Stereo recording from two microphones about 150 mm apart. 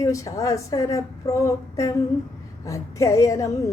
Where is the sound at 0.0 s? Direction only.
20° left (ahead or behind).